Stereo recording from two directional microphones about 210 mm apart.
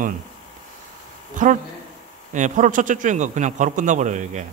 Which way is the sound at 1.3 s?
40° right (ahead or behind).